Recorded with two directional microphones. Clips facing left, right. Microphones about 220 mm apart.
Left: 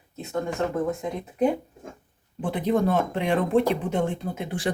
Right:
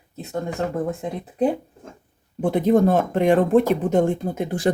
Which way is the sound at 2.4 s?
45° right (ahead or behind).